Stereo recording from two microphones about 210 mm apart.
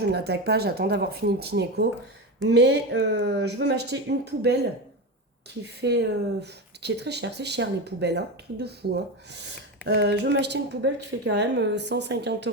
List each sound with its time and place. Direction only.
0.0 s speech: 50° right (ahead or behind)
5.8 s a woman's voice: 55° right (ahead or behind)